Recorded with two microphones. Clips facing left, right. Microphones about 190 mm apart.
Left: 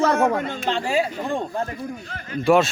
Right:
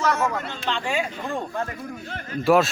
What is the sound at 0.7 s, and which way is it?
Speech, 40° left (ahead or behind).